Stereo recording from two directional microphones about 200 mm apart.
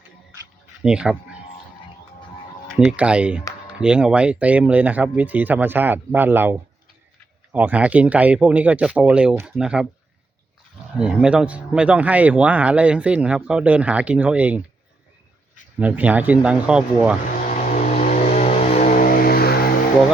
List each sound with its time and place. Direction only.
0.8 s speech: 5° right (ahead or behind)
2.7 s speech: 5° right (ahead or behind)
10.9 s speech: 5° right (ahead or behind)
15.8 s speech: 10° right (ahead or behind)
17.5 s vehicle: 40° left (ahead or behind)
18.8 s vehicle: 45° left (ahead or behind)